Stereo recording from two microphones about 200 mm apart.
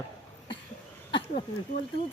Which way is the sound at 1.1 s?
25° left (ahead or behind).